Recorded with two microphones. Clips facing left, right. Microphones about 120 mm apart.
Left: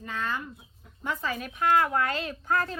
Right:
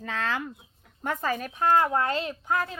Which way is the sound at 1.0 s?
45° right (ahead or behind).